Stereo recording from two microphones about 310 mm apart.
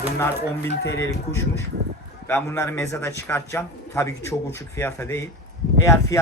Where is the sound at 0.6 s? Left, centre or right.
Left.